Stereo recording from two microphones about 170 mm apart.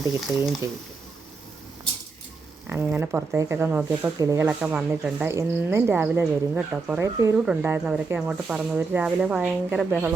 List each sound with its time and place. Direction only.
0.0 s speech: 20° right (ahead or behind)
2.9 s speech: 10° right (ahead or behind)
4.4 s speech: 5° right (ahead or behind)
7.0 s speech: 15° right (ahead or behind)